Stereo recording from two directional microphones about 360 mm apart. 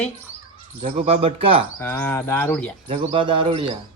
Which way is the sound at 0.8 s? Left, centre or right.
Centre.